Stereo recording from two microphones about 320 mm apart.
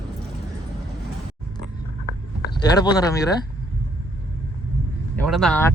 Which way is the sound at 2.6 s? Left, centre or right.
Centre.